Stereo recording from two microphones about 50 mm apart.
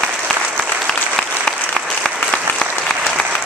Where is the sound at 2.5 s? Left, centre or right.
Left.